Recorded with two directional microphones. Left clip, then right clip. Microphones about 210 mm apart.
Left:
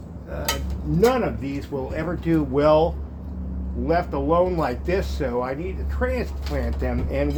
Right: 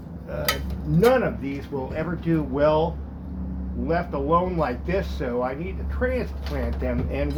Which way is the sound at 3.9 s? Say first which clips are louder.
Left 2 dB; 55° left (ahead or behind).